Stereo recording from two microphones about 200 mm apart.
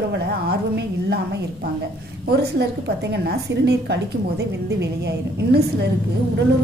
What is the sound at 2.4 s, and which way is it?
A woman's voice, 55° right (ahead or behind).